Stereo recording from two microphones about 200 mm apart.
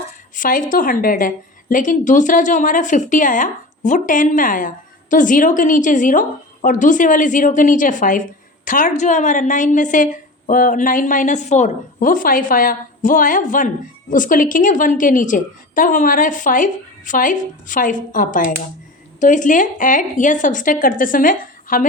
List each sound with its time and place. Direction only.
0.3 s a woman's voice: 40° left (ahead or behind)